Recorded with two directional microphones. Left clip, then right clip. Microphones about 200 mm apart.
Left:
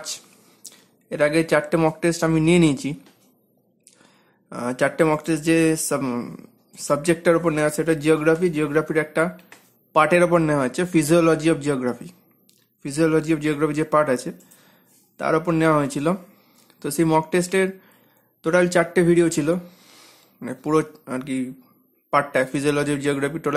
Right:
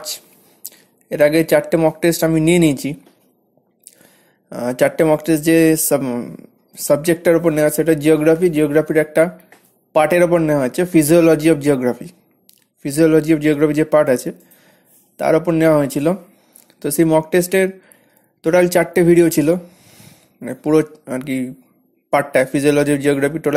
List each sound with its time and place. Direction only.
0.7 s a sound: 10° right (ahead or behind)
2.0 s speech: 15° right (ahead or behind)
4.0 s speech: 15° right (ahead or behind)
6.0 s speech: 5° right (ahead or behind)
19.6 s a sound: centre (ahead or behind)
20.4 s speech: 10° right (ahead or behind)